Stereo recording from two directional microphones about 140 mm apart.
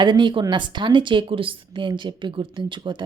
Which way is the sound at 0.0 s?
35° right (ahead or behind).